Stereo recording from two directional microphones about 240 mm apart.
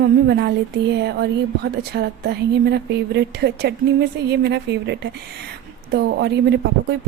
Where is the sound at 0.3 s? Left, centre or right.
Right.